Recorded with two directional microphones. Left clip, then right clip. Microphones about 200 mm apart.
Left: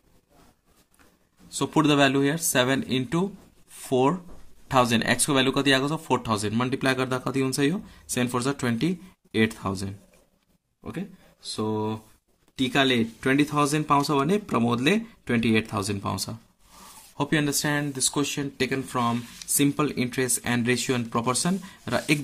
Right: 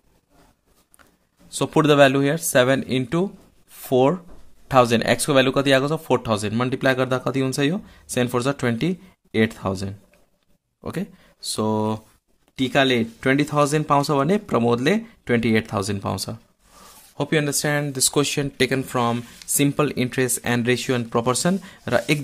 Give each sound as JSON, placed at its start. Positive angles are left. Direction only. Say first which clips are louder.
{"t": 1.5, "sound": "speech", "louder": "right 5 dB", "side_deg": -25}
{"t": 3.7, "sound": "a sound", "louder": "right 5 dB", "side_deg": -20}
{"t": 4.6, "sound": "speech", "louder": "right 5 dB", "side_deg": -20}
{"t": 10.8, "sound": "speech", "louder": "right 6 dB", "side_deg": -45}
{"t": 12.5, "sound": "speech", "louder": "right 4 dB", "side_deg": -25}